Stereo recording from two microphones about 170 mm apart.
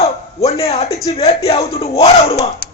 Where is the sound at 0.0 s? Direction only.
35° left (ahead or behind).